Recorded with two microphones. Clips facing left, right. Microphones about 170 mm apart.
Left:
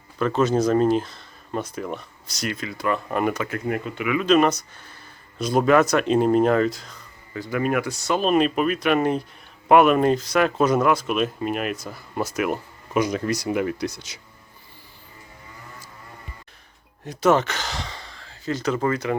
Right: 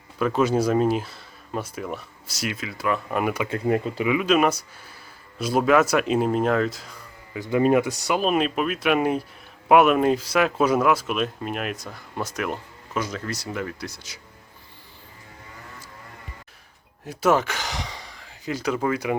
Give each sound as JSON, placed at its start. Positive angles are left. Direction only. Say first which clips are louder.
{"t": 0.2, "sound": "speech", "louder": "left 1 dB", "side_deg": -10}
{"t": 3.5, "sound": "speech", "louder": "right 3 dB", "side_deg": -30}
{"t": 4.2, "sound": "speech", "louder": "left 5 dB", "side_deg": -10}
{"t": 17.1, "sound": "speech", "louder": "left 2 dB", "side_deg": -5}